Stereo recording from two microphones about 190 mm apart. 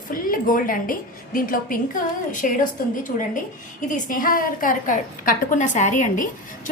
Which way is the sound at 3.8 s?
45° left (ahead or behind).